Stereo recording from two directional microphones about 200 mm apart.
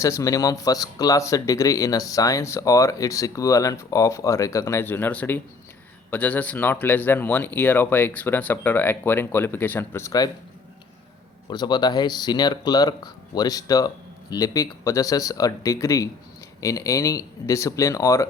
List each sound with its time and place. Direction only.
0.0 s speech: 15° left (ahead or behind)
11.4 s speech: 20° left (ahead or behind)